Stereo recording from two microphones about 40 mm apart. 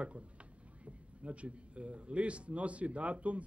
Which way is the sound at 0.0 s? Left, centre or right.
Right.